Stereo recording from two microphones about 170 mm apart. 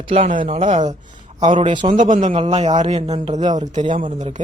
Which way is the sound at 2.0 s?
50° right (ahead or behind).